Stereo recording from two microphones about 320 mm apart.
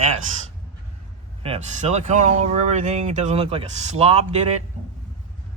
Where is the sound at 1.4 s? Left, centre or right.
Centre.